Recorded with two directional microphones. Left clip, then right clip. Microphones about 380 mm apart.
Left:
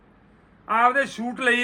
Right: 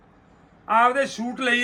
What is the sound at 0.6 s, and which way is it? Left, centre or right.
Speech, centre.